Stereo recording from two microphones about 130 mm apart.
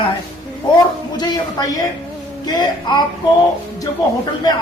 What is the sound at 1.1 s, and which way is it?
A man's voice, 30° left (ahead or behind).